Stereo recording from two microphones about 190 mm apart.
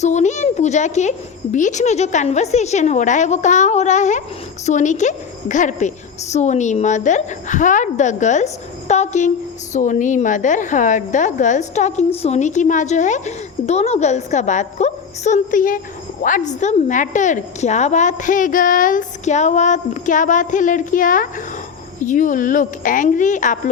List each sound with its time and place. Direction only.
0.0 s a woman's voice: 40° left (ahead or behind)